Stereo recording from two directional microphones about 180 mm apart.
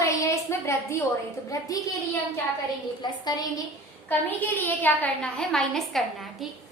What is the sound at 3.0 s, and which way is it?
Speech, 25° left (ahead or behind).